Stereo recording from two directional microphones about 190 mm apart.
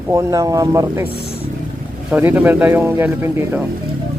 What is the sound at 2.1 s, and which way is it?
Speech, 10° right (ahead or behind).